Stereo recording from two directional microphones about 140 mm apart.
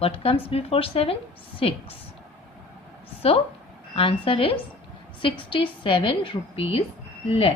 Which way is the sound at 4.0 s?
40° left (ahead or behind).